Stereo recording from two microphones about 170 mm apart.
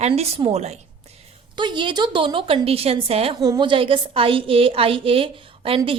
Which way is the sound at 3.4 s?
25° right (ahead or behind).